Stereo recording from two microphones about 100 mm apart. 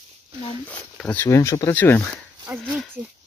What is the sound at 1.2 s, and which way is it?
Speech, 30° left (ahead or behind).